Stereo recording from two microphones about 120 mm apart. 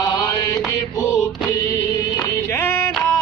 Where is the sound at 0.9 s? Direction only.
20° left (ahead or behind).